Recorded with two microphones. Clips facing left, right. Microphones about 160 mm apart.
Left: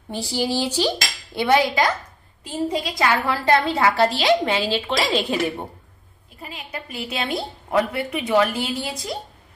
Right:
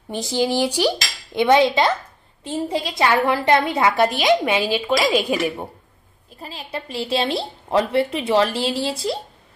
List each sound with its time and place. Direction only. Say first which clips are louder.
0.1 s cutlery: right 3 dB; 20° right (ahead or behind)
2.4 s a woman's voice: right 1 dB; 25° right (ahead or behind)
6.4 s a woman's voice: right 3 dB; 30° right (ahead or behind)